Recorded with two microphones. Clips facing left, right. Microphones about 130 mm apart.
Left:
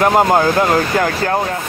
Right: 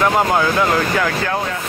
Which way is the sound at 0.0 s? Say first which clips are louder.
Left 4 dB; 40° left (ahead or behind).